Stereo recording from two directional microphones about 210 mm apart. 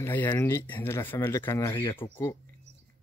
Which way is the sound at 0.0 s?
10° left (ahead or behind).